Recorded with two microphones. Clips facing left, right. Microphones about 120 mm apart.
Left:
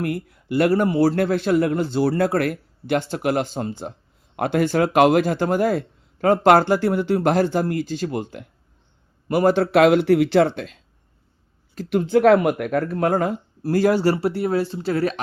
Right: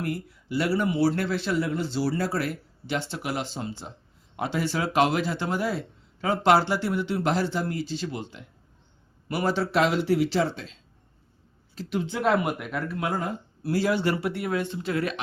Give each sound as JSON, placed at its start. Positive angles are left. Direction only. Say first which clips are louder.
{"t": 0.0, "sound": "speech", "louder": "left 5 dB", "side_deg": 55}